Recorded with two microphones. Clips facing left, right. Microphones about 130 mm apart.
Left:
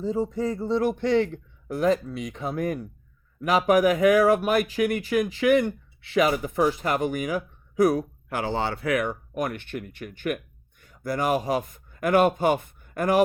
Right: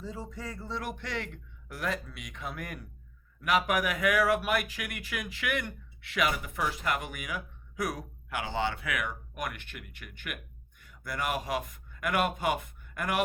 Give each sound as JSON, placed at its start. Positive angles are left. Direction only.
{"t": 0.0, "sound": "speech", "side_deg": 30}